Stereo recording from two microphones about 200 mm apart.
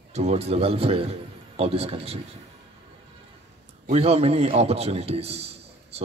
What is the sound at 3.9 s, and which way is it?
A man's voice, 30° right (ahead or behind).